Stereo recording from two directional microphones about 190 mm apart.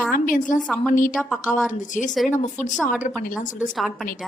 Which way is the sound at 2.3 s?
40° left (ahead or behind).